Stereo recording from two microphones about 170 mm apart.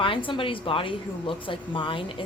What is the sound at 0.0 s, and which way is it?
A woman's voice, 30° left (ahead or behind).